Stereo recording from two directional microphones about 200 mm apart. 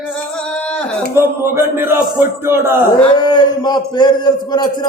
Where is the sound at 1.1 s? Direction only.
10° right (ahead or behind).